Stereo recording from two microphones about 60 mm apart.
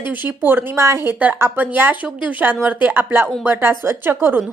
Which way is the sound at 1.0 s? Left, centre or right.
Right.